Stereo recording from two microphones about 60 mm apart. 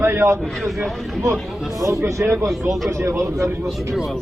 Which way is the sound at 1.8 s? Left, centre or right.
Right.